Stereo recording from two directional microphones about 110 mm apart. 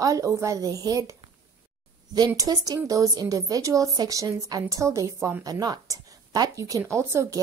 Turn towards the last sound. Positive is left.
turn(degrees=-25)  # may be behind; listen again after turning